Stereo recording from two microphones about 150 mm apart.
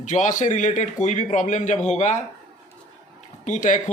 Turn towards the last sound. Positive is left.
turn(degrees=55)  # may be behind; listen again after turning